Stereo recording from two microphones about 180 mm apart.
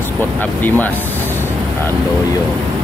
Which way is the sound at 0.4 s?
10° left (ahead or behind).